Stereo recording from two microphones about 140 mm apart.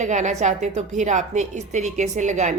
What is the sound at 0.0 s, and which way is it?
A woman's voice, 60° right (ahead or behind).